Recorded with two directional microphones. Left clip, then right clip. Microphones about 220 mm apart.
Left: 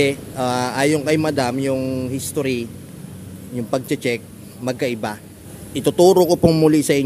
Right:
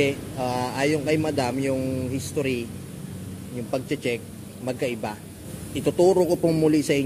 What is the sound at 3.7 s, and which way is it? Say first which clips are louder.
A man's voice: left 5 dB; 30° left (ahead or behind).